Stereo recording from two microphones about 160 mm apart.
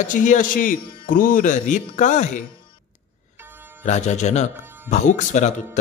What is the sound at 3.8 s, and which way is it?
Speech, 45° left (ahead or behind).